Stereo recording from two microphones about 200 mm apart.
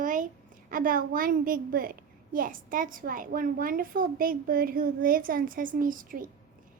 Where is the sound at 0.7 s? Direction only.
45° right (ahead or behind).